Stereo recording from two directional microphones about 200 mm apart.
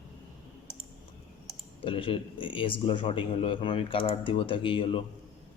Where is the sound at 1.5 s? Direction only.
25° left (ahead or behind).